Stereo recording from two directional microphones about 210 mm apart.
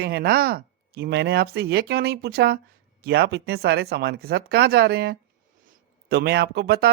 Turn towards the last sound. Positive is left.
turn(degrees=-50)  # may be behind; listen again after turning